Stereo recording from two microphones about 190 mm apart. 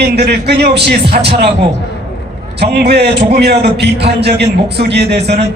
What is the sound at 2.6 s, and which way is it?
A man's voice, 60° right (ahead or behind).